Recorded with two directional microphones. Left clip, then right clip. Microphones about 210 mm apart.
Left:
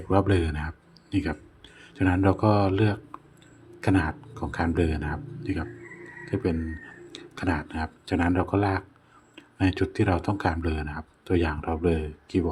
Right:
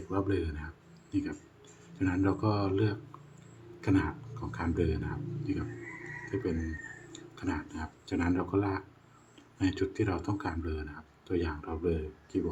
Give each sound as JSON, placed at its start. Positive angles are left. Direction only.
{"t": 0.1, "sound": "speech", "side_deg": 30}